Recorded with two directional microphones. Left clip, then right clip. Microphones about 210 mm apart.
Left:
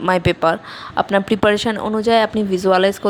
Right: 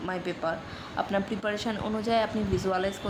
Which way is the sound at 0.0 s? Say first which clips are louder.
Left 15 dB; 40° left (ahead or behind).